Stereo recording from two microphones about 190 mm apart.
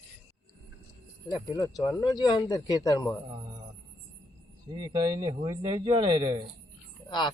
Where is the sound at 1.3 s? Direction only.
20° left (ahead or behind).